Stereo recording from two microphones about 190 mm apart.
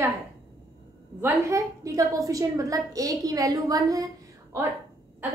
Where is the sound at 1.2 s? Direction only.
15° right (ahead or behind).